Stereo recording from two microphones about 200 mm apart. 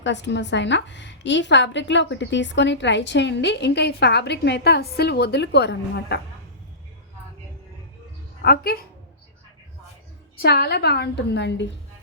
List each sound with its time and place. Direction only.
0.0 s a woman's voice: 60° left (ahead or behind)
8.4 s a woman's voice: 50° left (ahead or behind)
10.3 s a woman's voice: 50° left (ahead or behind)